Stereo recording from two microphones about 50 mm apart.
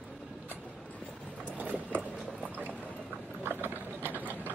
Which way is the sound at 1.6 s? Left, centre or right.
Right.